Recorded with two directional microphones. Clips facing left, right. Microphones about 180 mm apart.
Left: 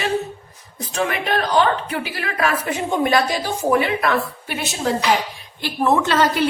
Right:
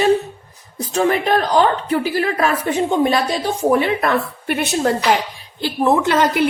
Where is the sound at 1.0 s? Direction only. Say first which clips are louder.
Right 5 dB; 40° right (ahead or behind).